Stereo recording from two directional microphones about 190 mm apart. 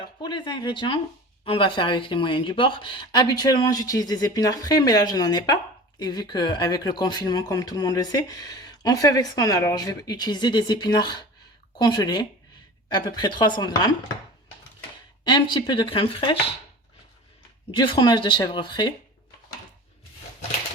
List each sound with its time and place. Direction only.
0.2 s speech: 25° left (ahead or behind)
15.2 s speech: 25° left (ahead or behind)
17.7 s speech: 25° left (ahead or behind)